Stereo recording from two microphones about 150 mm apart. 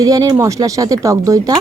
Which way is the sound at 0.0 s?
25° right (ahead or behind).